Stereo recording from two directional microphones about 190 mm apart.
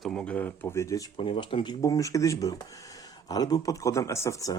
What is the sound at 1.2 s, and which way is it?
A man's voice, 30° left (ahead or behind).